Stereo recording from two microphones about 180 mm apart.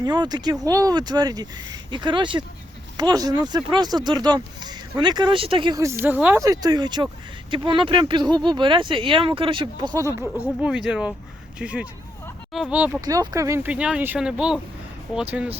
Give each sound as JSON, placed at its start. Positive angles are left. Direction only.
{"t": 0.0, "sound": "speech", "side_deg": -25}
{"t": 10.3, "sound": "speech", "side_deg": -10}
{"t": 13.1, "sound": "speech", "side_deg": -20}